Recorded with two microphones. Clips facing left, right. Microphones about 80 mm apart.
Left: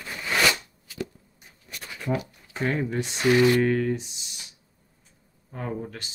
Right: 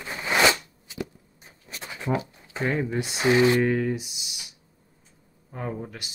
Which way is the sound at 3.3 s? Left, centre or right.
Right.